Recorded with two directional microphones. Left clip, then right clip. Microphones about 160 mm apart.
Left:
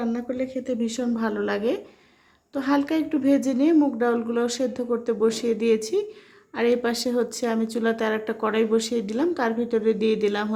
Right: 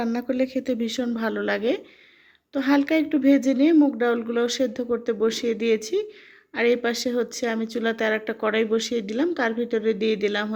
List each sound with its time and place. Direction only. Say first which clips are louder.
0.0 s speech: right 3 dB; 30° right (ahead or behind); by 10.5 s 15° right (ahead or behind)